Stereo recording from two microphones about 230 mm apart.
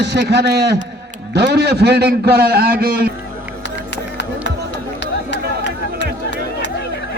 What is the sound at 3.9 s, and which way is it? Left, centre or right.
Music, left.